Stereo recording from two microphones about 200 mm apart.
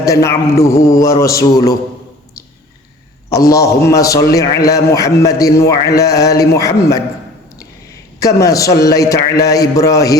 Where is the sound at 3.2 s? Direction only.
15° left (ahead or behind).